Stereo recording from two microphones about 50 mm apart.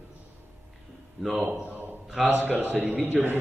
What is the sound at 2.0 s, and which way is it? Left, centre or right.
Speech, centre.